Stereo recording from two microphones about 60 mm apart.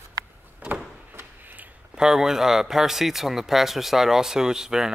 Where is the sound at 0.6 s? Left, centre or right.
Right.